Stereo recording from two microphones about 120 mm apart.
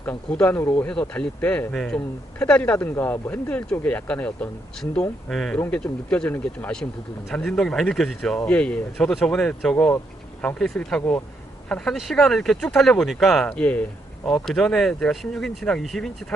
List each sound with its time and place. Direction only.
0.0 s speech: 10° left (ahead or behind)